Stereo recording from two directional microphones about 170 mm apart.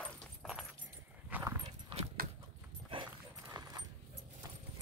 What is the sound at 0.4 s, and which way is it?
Keys jangling, 5° right (ahead or behind).